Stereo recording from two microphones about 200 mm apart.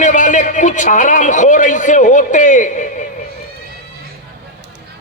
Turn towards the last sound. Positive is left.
turn(degrees=40)  # may be behind; listen again after turning